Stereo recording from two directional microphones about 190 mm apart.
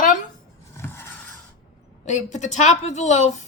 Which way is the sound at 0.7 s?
15° left (ahead or behind).